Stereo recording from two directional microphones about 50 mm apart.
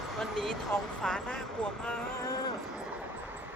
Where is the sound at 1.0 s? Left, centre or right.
Centre.